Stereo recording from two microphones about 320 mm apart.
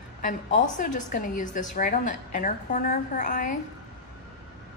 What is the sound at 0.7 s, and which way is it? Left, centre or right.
A woman's voice, left.